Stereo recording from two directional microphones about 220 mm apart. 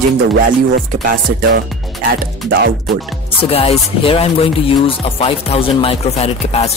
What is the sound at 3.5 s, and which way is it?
Speech, 25° left (ahead or behind).